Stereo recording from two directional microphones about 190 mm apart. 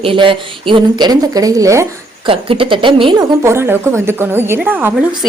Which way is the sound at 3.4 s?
15° right (ahead or behind).